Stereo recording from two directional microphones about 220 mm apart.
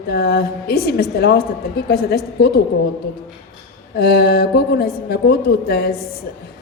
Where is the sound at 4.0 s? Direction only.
45° left (ahead or behind).